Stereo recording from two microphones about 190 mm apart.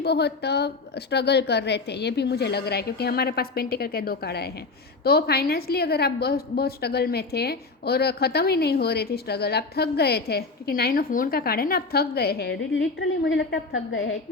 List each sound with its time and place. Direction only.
0.0 s a woman's voice: 60° left (ahead or behind)
13.0 s a woman's voice: 75° left (ahead or behind)